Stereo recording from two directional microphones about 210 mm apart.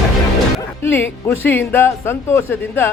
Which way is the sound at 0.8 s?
10° left (ahead or behind).